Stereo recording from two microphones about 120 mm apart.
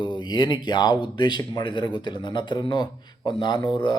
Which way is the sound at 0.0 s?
40° left (ahead or behind).